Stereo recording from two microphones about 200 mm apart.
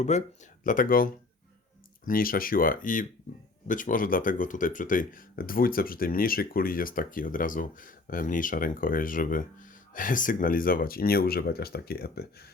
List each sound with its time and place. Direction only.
0.1 s speech: 35° left (ahead or behind); by 12.5 s 50° left (ahead or behind)